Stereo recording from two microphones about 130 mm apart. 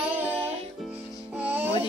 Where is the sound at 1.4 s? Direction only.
15° right (ahead or behind).